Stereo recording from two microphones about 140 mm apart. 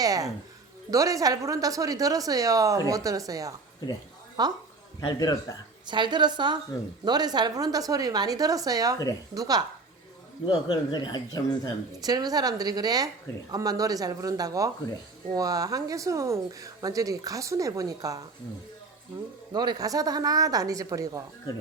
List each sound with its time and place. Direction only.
0.0 s speech: 25° right (ahead or behind)
4.9 s a man's voice: 25° left (ahead or behind)
5.8 s a woman's voice: 35° right (ahead or behind)
10.4 s speech: 35° left (ahead or behind)
11.9 s speech: 25° right (ahead or behind)
19.5 s speech: 30° right (ahead or behind)